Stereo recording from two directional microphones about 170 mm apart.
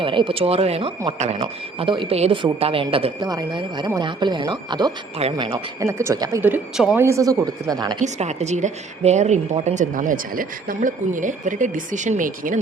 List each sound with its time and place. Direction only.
0.0 s speech: 30° right (ahead or behind)
5.8 s speech: 15° right (ahead or behind)
6.4 s speech: 5° right (ahead or behind)
7.0 s speech: 20° right (ahead or behind)
8.0 s a woman's voice: 40° right (ahead or behind)